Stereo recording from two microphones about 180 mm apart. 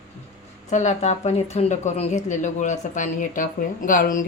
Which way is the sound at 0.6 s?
40° left (ahead or behind).